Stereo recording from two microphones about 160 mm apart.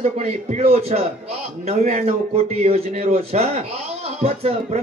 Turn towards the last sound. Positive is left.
turn(degrees=-40)  # may be behind; listen again after turning